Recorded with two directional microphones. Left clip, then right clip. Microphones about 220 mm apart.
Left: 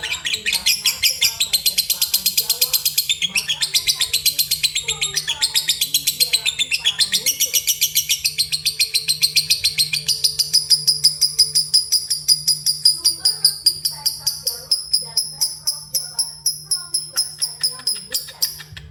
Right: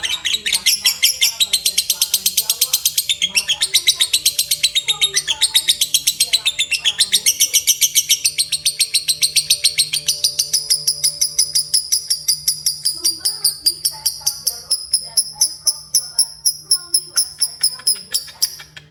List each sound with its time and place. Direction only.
0.0 s bird: 15° right (ahead or behind)
17.2 s music: 15° right (ahead or behind)